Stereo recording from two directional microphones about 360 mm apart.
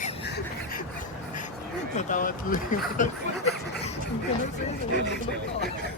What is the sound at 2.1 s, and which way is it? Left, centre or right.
Speech, left.